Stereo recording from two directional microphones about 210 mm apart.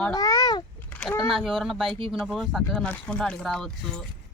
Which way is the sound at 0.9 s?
5° left (ahead or behind).